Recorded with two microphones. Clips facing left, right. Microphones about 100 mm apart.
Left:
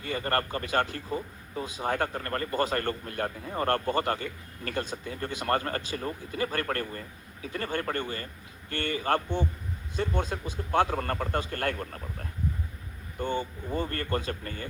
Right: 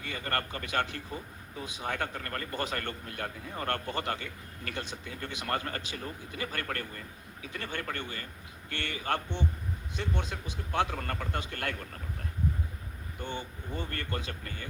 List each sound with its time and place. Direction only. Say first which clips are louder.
0.0 s a man's voice: left 5 dB; 35° left (ahead or behind)
13.1 s a man's voice: left 8 dB; 40° left (ahead or behind)